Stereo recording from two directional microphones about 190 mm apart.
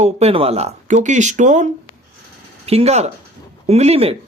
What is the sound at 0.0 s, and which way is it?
Speech, 35° right (ahead or behind).